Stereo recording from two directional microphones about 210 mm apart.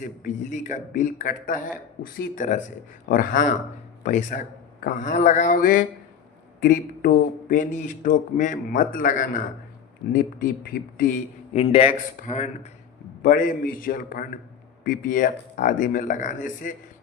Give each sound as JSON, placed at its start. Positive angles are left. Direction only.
{"t": 0.0, "sound": "speech", "side_deg": 35}
{"t": 11.5, "sound": "speech", "side_deg": 30}